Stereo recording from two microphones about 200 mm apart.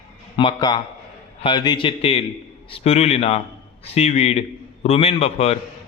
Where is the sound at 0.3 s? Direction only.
25° left (ahead or behind).